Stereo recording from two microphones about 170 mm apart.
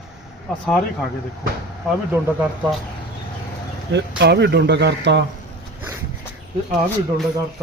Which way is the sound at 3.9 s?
80° right.